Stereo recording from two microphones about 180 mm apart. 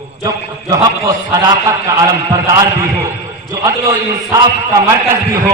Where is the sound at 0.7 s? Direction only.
15° right (ahead or behind).